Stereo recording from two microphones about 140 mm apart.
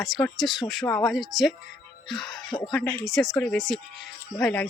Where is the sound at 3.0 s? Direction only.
Centre (ahead or behind).